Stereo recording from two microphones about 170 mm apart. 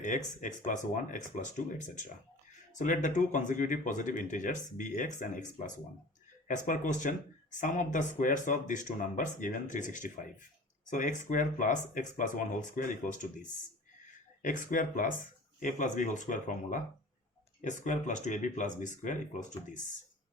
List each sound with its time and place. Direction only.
0.0 s speech: 50° left (ahead or behind)
14.4 s speech: 50° left (ahead or behind)